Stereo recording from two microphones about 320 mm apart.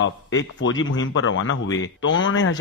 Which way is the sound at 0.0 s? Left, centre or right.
Left.